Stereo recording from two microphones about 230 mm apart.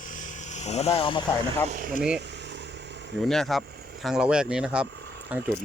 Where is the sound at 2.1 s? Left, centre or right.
Right.